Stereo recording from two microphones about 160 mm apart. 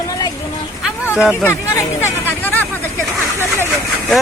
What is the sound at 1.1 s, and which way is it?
Speech, 5° right (ahead or behind).